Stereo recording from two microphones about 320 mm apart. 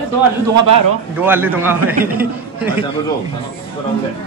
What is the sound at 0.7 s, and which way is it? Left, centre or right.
Speech, right.